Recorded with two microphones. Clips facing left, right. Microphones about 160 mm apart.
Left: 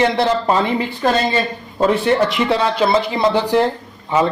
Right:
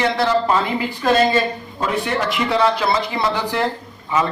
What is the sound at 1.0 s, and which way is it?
Speech, 40° left (ahead or behind).